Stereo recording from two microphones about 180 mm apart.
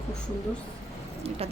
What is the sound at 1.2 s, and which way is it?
Speech, 35° right (ahead or behind).